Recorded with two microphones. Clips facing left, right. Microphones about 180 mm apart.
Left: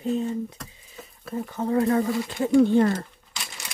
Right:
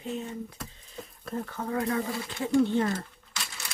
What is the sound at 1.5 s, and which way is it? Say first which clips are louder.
Speech: left 9 dB; 25° left (ahead or behind).